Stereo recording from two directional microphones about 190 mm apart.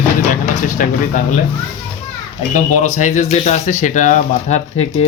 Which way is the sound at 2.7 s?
40° left (ahead or behind).